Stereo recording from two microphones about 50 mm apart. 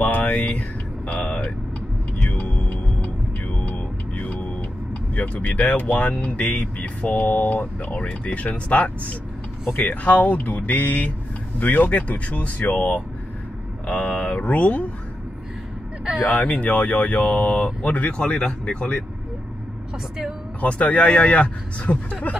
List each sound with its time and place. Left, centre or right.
0.0 s a sound: left
2.3 s music: left
5.1 s speech: left
16.3 s speech: left
20.6 s speech: left